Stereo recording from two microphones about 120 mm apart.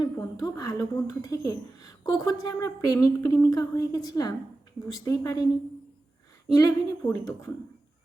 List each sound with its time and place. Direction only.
0.0 s speech: 30° left (ahead or behind)
6.5 s a woman's voice: 30° left (ahead or behind)